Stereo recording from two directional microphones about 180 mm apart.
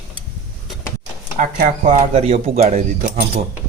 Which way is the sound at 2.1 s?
35° right (ahead or behind).